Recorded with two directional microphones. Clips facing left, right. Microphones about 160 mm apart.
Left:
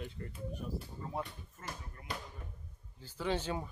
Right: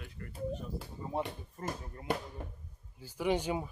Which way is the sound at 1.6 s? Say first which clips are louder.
Right 8 dB; 35° right (ahead or behind).